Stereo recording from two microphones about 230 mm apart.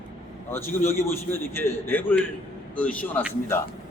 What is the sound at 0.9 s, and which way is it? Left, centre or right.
A man's voice, centre.